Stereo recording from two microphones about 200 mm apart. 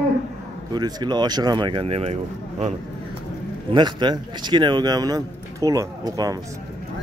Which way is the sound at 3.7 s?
20° right (ahead or behind).